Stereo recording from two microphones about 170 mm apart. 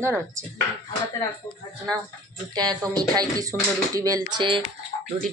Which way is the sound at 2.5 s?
25° right (ahead or behind).